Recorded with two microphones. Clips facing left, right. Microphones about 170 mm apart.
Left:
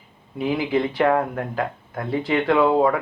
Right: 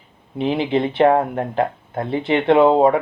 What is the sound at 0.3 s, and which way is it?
Speech, 25° right (ahead or behind).